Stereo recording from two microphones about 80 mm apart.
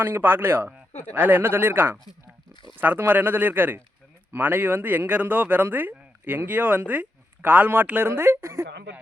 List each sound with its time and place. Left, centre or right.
0.0 s speech: right